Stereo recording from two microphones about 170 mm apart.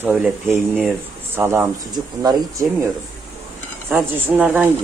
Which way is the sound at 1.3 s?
15° right (ahead or behind).